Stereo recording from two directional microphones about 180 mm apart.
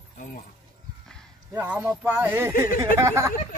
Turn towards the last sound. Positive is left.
turn(degrees=-15)  # may be behind; listen again after turning